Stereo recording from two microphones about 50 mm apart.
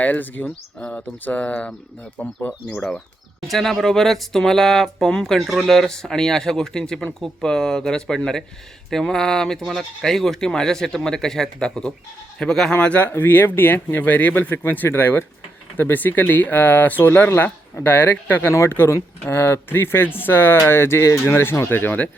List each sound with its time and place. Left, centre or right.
0.0 s speech: left
2.6 s speech: left
3.4 s speech: centre
5.4 s speech: centre
12.7 s speech: left
14.5 s speech: left
14.9 s speech: left
17.1 s speech: left
21.7 s speech: left